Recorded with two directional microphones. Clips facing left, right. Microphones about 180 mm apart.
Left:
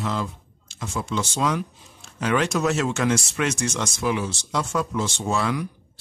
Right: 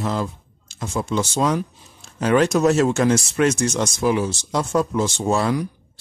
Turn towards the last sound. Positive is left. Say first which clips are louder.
# right 4 dB
turn(degrees=-40)  # may be behind; listen again after turning